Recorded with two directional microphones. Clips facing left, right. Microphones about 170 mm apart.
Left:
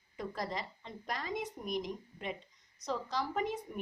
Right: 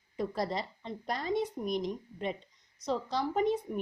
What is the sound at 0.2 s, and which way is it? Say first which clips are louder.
A woman's voice: right 6 dB; 35° right (ahead or behind).